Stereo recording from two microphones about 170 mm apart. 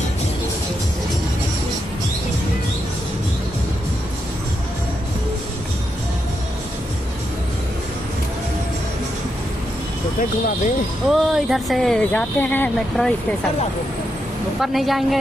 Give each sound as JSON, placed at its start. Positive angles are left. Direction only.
{"t": 11.1, "sound": "speech", "side_deg": 0}
{"t": 14.6, "sound": "speech", "side_deg": 0}